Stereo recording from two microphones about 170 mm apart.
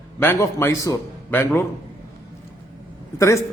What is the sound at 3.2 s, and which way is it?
Speech, 15° left (ahead or behind).